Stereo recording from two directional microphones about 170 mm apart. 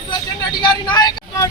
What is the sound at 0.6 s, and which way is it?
Vehicle, 25° left (ahead or behind).